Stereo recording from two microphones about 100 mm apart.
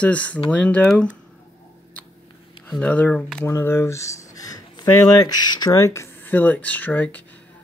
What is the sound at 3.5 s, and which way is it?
Speech, 25° left (ahead or behind).